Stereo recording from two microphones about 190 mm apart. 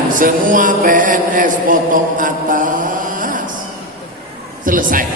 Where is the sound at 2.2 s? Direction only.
45° right (ahead or behind).